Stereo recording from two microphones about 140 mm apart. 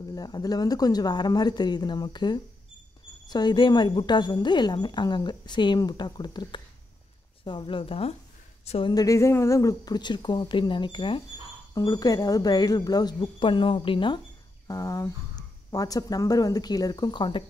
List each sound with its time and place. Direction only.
0.1 s a woman's voice: 30° left (ahead or behind)
8.9 s a woman's voice: 25° left (ahead or behind)
14.7 s speech: 25° left (ahead or behind)